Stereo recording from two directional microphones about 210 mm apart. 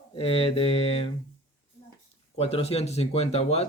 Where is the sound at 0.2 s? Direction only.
25° left (ahead or behind).